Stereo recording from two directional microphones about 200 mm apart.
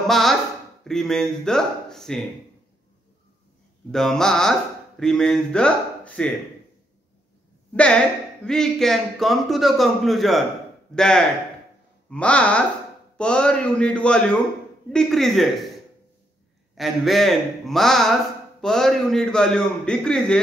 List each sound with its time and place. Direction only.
0.0 s speech: centre (ahead or behind)
3.9 s speech: centre (ahead or behind)
7.7 s speech: 5° left (ahead or behind)
16.7 s speech: centre (ahead or behind)